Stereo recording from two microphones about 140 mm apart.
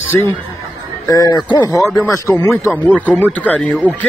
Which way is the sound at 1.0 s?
25° left (ahead or behind).